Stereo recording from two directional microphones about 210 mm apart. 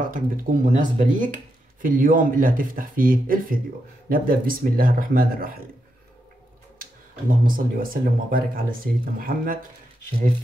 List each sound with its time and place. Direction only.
0.0 s speech: 40° right (ahead or behind)
6.8 s speech: 40° right (ahead or behind)